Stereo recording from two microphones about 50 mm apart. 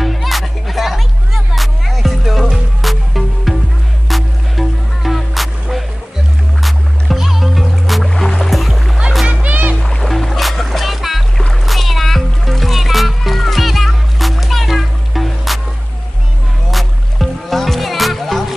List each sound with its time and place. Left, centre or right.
0.0 s music: centre
9.3 s music: right
9.8 s music: centre
11.3 s music: centre
16.7 s music: centre